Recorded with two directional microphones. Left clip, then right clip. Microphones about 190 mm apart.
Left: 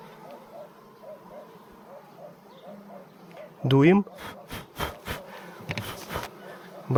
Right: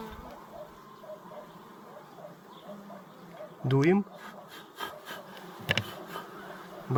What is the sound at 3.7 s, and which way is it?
Speech, 50° left (ahead or behind).